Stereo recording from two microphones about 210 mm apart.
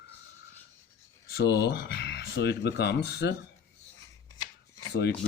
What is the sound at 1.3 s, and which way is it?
Speech, 50° left (ahead or behind).